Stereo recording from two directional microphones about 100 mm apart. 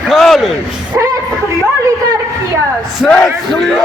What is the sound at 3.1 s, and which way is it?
Speech, 5° left (ahead or behind).